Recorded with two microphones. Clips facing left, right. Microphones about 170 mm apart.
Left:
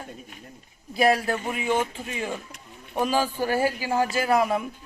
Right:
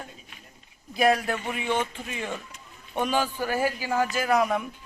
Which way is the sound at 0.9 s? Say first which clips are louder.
Left 1 dB; 5° left (ahead or behind).